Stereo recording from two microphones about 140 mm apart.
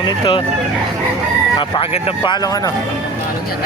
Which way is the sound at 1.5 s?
30° left (ahead or behind).